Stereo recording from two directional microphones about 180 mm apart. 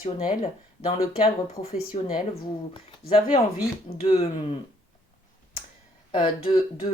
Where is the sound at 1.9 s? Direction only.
35° left (ahead or behind).